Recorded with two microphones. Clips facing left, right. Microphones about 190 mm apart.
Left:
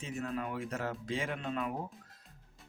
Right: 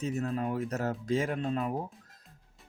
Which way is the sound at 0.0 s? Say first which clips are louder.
Right 6 dB; 40° right (ahead or behind).